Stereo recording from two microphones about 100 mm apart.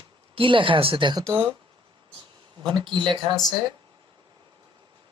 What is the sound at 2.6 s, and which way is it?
Speech, 50° right (ahead or behind).